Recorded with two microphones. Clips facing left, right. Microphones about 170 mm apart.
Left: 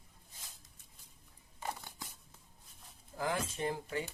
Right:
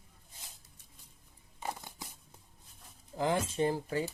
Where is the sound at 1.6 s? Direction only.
20° right (ahead or behind).